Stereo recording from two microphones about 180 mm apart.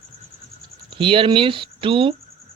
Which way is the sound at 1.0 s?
30° right (ahead or behind).